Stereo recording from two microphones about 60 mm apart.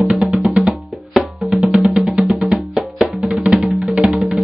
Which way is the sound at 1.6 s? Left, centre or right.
Centre.